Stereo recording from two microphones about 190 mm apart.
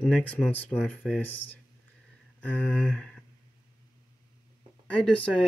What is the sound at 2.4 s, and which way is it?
Speech, 10° left (ahead or behind).